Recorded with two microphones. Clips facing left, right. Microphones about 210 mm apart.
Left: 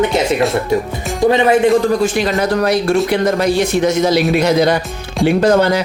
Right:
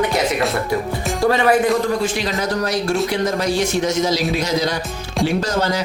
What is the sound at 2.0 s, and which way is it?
Speech, 55° left (ahead or behind).